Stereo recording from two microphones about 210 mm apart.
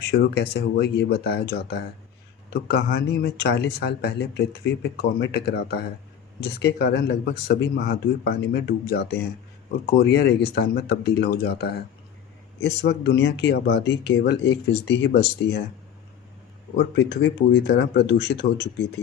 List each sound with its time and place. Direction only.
0.0 s speech: 50° left (ahead or behind)
16.7 s speech: 55° left (ahead or behind)